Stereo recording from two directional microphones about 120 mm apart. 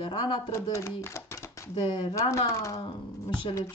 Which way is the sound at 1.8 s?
40° left (ahead or behind).